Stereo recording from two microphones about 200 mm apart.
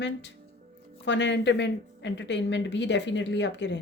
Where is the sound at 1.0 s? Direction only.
65° left (ahead or behind).